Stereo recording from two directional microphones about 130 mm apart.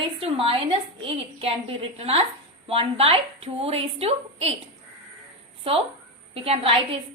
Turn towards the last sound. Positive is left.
turn(degrees=-45)  # may be behind; listen again after turning